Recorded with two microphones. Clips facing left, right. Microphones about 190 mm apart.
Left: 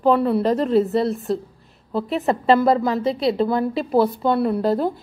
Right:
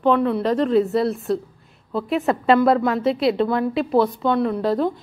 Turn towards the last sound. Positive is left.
turn(degrees=5)  # may be behind; listen again after turning